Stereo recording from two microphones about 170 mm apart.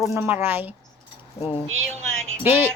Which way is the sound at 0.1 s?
15° right (ahead or behind).